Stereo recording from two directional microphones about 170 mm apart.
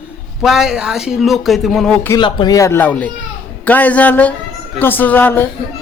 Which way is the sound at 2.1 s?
25° left (ahead or behind).